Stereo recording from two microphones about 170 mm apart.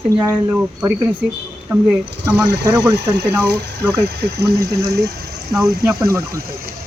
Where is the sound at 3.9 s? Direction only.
75° right (ahead or behind).